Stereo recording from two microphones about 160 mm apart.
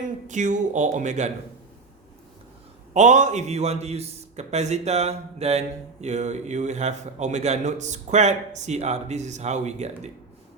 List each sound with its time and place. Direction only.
0.3 s a man's voice: 50° right (ahead or behind)
2.9 s a man's voice: 50° right (ahead or behind)